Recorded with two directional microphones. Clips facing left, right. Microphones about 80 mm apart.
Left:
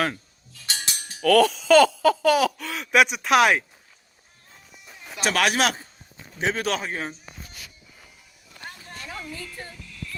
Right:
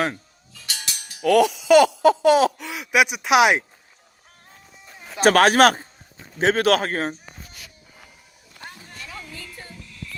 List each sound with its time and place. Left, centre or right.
0.7 s music: left
1.2 s speech: centre
5.2 s speech: right